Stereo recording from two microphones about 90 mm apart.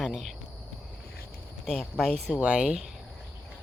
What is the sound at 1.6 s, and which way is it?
Speech, centre (ahead or behind).